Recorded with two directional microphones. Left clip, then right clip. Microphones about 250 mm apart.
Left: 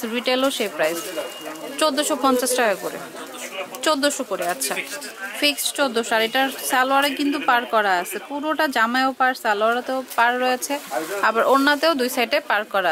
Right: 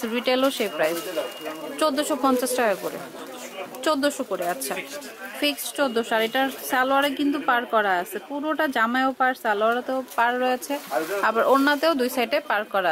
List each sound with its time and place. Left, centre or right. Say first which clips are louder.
0.0 s speech: left 1 dB; centre
3.8 s speech: left 3 dB; centre
10.9 s speech: right 2 dB; centre
11.5 s speech: left 2 dB; centre